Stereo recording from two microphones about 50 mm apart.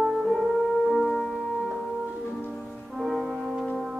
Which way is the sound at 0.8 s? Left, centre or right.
Centre.